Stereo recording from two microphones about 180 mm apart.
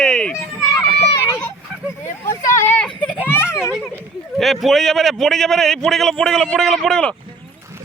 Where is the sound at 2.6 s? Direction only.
10° left (ahead or behind).